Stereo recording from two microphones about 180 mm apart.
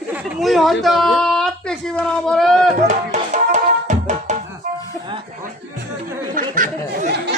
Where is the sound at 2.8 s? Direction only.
40° right (ahead or behind).